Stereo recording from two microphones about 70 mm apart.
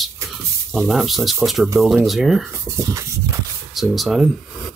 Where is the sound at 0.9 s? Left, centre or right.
Centre.